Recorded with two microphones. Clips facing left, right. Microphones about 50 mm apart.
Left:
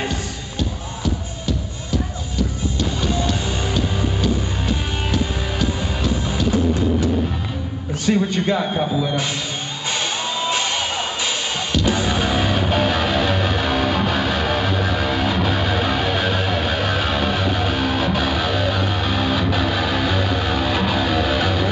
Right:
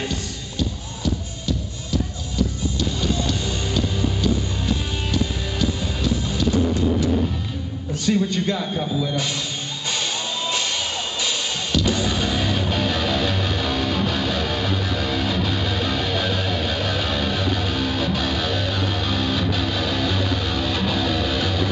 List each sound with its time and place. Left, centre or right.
2.8 s music: centre
8.0 s speech: centre
9.8 s music: centre